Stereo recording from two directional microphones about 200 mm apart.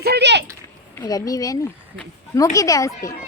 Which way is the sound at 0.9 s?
15° left (ahead or behind).